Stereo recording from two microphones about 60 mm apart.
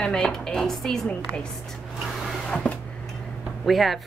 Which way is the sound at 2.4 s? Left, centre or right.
Centre.